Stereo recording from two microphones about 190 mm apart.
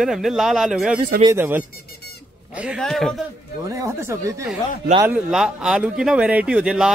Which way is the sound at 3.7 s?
15° right (ahead or behind).